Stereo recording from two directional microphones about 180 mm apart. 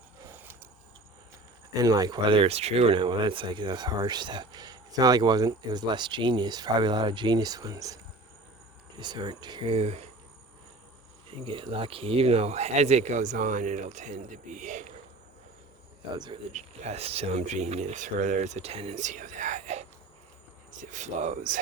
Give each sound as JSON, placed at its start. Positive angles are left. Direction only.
{"t": 0.3, "sound": "vehicle", "side_deg": -10}
{"t": 1.8, "sound": "speech", "side_deg": -20}
{"t": 9.0, "sound": "speech", "side_deg": -25}
{"t": 11.3, "sound": "speech", "side_deg": -30}
{"t": 16.1, "sound": "speech", "side_deg": -25}
{"t": 16.5, "sound": "speech", "side_deg": -40}
{"t": 20.9, "sound": "speech", "side_deg": -40}